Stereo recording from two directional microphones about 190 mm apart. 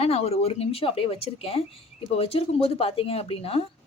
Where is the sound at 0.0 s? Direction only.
30° left (ahead or behind).